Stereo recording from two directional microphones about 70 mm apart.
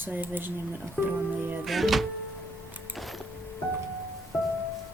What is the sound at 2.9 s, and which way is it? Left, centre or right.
Music, centre.